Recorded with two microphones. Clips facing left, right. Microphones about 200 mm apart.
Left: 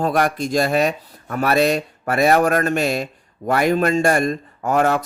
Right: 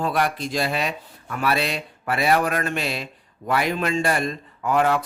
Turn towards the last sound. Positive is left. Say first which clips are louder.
# left 3 dB
turn(degrees=45)  # may be behind; listen again after turning